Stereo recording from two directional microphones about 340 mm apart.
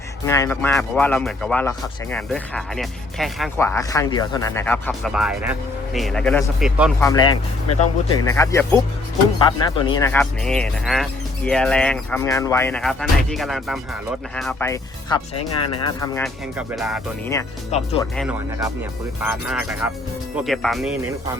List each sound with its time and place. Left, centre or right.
0.3 s speech: centre
7.0 s speech: centre
17.7 s speech: centre
18.2 s speech: centre